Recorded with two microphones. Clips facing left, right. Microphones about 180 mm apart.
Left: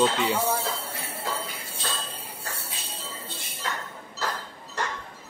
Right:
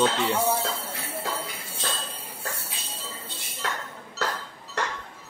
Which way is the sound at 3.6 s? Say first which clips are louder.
Right 1 dB; 70° right (ahead or behind).